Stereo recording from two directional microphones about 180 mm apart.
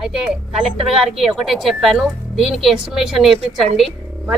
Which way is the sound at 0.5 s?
Centre (ahead or behind).